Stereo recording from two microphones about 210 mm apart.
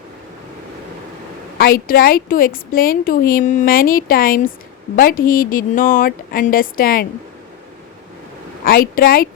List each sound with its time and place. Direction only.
1.5 s a woman's voice: 45° left (ahead or behind)
8.6 s a woman's voice: 45° left (ahead or behind)